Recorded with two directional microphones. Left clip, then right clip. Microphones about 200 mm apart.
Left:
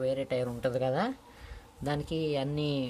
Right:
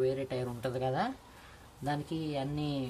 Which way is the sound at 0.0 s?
40° left (ahead or behind).